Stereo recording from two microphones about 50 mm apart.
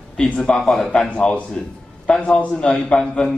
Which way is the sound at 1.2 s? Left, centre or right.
Centre.